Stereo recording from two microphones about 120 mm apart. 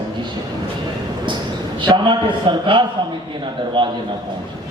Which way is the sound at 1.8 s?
40° right (ahead or behind).